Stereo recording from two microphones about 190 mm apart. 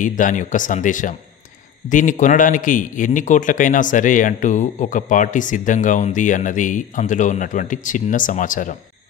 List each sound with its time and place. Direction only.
0.0 s a man's voice: 45° left (ahead or behind)